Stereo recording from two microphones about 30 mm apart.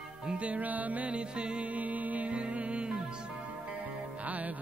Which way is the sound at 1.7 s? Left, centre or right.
Right.